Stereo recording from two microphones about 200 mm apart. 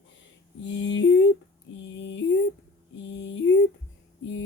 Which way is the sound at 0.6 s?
65° left (ahead or behind).